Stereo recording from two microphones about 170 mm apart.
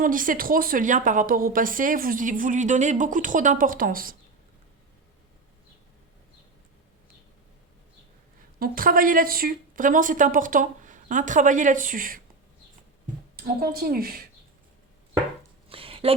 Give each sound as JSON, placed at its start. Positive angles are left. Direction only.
{"t": 0.0, "sound": "a woman's voice", "side_deg": -55}
{"t": 8.5, "sound": "a woman's voice", "side_deg": -60}
{"t": 13.3, "sound": "a woman's voice", "side_deg": -60}
{"t": 15.7, "sound": "a sound", "side_deg": -35}